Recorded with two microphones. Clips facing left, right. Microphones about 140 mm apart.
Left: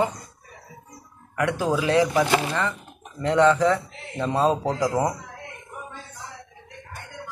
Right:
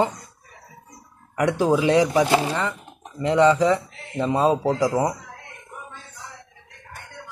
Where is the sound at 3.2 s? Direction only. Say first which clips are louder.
Right 1 dB; 15° right (ahead or behind).